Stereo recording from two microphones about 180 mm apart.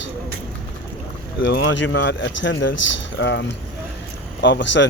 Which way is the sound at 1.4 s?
85° left.